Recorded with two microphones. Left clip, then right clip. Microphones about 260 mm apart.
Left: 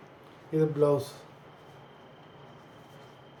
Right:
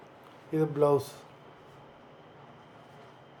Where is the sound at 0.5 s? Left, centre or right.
Centre.